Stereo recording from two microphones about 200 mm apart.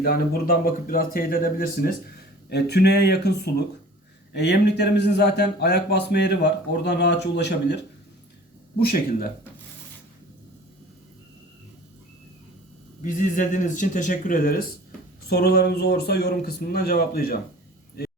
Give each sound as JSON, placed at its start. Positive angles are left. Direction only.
{"t": 0.0, "sound": "a man's voice", "side_deg": 45}
{"t": 13.0, "sound": "a man's voice", "side_deg": 40}